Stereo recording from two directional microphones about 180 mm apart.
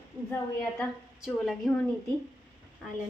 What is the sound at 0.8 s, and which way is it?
A woman's voice, centre (ahead or behind).